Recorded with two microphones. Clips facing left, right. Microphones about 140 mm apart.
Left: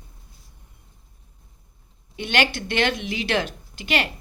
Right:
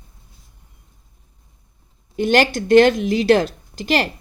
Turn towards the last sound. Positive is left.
turn(degrees=-40)  # may be behind; listen again after turning